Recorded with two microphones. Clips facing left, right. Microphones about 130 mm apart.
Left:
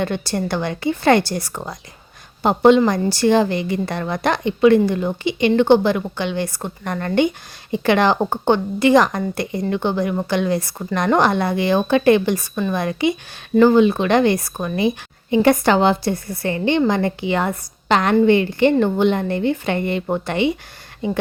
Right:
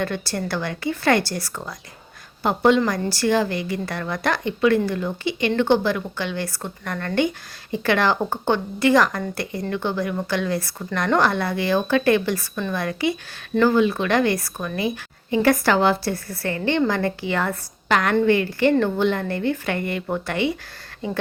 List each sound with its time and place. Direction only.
0.0 s a woman's voice: 20° left (ahead or behind)